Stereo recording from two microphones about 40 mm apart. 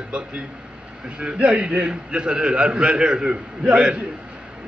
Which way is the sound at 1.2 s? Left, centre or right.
Right.